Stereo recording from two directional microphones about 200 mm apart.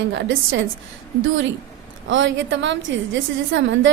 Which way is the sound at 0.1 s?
65° right (ahead or behind).